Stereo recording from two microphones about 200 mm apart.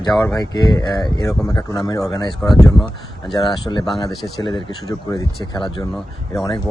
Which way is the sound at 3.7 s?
10° left (ahead or behind).